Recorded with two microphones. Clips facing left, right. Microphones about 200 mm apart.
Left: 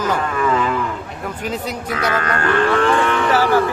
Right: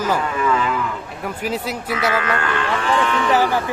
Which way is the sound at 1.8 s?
45° left (ahead or behind).